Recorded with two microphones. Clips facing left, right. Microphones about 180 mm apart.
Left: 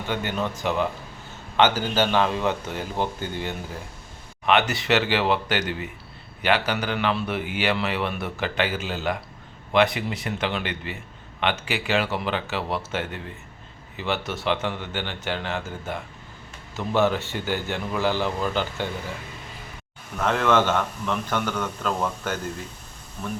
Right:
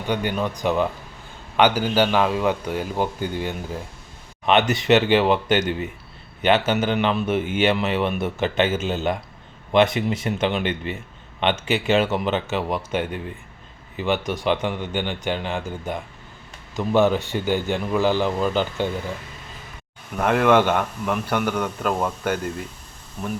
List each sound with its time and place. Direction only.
0.1 s a man's voice: 15° right (ahead or behind)
20.2 s speech: 10° right (ahead or behind)